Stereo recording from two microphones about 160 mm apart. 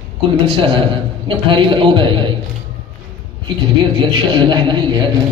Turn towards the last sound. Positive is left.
turn(degrees=-30)  # may be behind; listen again after turning